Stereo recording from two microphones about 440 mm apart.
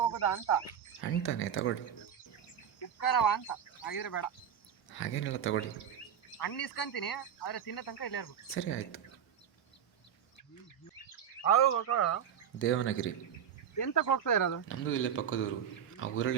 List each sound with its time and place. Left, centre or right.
0.0 s speech: left
2.8 s speech: left
4.9 s speech: left
6.3 s speech: left
8.4 s speech: left
11.4 s speech: left
13.7 s speech: left
14.7 s a man's voice: left